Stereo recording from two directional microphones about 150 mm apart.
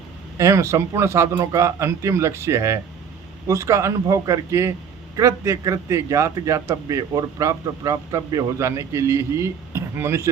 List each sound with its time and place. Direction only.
0.3 s a man's voice: 20° right (ahead or behind)